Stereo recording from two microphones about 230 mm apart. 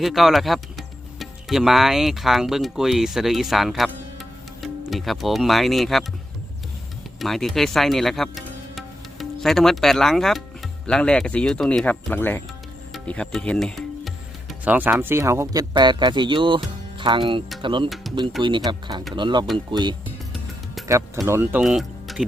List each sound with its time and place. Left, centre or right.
0.0 s speech: centre
7.2 s speech: centre; by 17.8 s right
17.8 s speech: centre
18.4 s speech: right
20.8 s music: centre
21.2 s speech: centre